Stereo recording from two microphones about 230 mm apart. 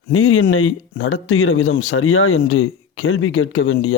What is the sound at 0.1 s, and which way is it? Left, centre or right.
Speech, left.